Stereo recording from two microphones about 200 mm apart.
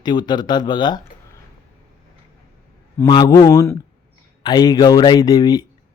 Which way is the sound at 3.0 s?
20° left (ahead or behind).